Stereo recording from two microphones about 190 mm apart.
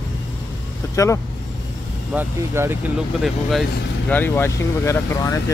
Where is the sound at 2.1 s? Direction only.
10° right (ahead or behind).